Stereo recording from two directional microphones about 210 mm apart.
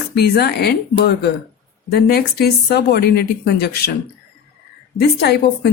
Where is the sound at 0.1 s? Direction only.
50° left (ahead or behind).